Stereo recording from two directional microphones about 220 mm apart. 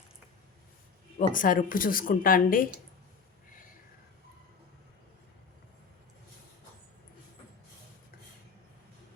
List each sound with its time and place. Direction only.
1.3 s speech: 40° left (ahead or behind)